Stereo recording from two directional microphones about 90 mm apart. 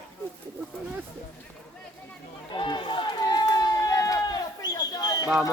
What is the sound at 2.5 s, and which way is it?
Run, 60° left (ahead or behind).